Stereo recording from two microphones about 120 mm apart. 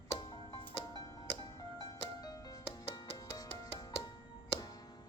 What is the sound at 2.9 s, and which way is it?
Music, 35° left (ahead or behind).